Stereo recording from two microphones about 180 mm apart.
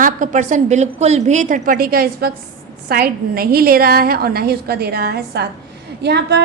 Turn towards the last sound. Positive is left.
turn(degrees=-65)  # may be behind; listen again after turning